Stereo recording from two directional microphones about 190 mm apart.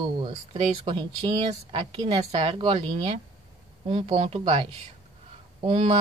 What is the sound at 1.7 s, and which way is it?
A woman's voice, 30° right (ahead or behind).